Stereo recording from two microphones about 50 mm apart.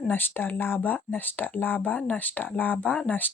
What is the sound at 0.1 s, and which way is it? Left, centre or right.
Speech, left.